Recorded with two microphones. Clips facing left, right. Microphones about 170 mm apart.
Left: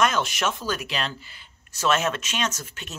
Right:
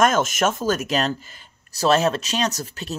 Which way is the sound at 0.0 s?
45° right (ahead or behind).